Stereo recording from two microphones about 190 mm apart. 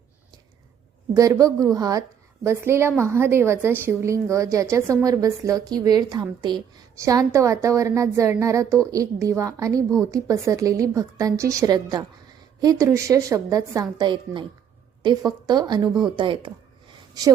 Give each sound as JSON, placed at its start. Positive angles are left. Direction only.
{"t": 1.1, "sound": "a woman's voice", "side_deg": -15}